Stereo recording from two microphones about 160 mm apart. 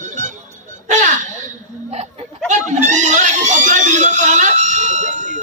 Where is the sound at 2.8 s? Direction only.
50° right (ahead or behind).